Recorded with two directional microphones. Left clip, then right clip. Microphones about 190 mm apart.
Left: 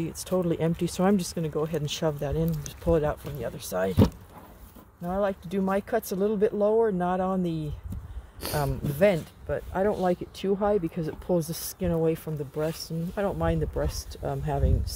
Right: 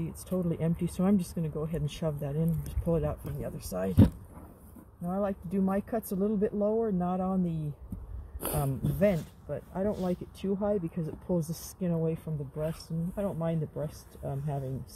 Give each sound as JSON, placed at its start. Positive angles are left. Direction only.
{"t": 0.0, "sound": "speech", "side_deg": 40}
{"t": 8.5, "sound": "speech", "side_deg": 40}